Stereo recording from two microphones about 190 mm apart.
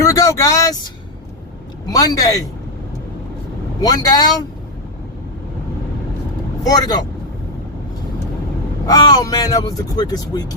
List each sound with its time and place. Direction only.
0.0 s vehicle: 15° left (ahead or behind)
1.9 s speech: 20° left (ahead or behind)
3.8 s speech: 20° left (ahead or behind)
6.7 s speech: 20° left (ahead or behind)
8.9 s speech: 20° left (ahead or behind)